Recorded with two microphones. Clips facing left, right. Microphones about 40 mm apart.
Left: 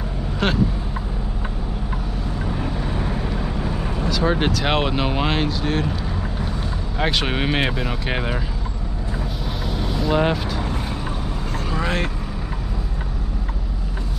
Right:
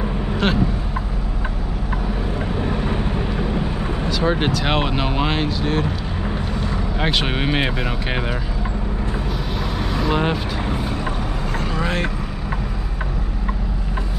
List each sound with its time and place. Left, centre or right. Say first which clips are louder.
0.4 s speech: right 1 dB; centre
2.7 s vehicle: right 4 dB; right
3.0 s vehicle: right 2 dB; centre
7.0 s speech: left 1 dB; centre
9.7 s vehicle: even; centre
11.7 s vehicle: even; centre